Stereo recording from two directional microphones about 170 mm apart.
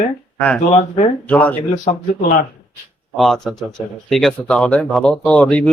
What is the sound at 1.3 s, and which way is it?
Speech, 10° left (ahead or behind).